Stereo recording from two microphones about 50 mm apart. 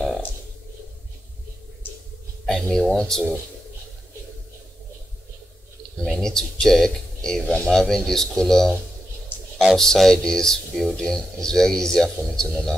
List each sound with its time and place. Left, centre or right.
2.4 s speech: centre
6.0 s speech: centre
9.3 s a sound: left
9.8 s speech: centre